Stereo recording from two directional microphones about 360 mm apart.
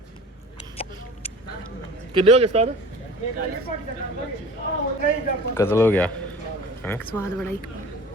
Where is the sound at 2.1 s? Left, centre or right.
Centre.